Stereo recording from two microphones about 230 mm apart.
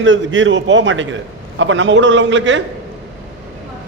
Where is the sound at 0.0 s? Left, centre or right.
Right.